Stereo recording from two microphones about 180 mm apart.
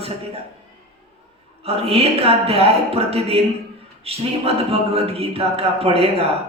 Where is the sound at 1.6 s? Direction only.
35° right (ahead or behind).